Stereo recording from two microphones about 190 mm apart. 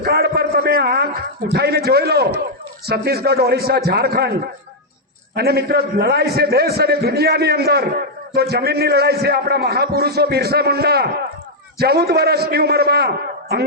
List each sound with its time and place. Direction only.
0.0 s a sound: 55° right (ahead or behind)
1.5 s a man's voice: 55° right (ahead or behind)
5.3 s a man's voice: 55° right (ahead or behind)